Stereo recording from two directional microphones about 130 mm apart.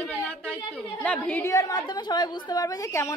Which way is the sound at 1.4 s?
25° left (ahead or behind).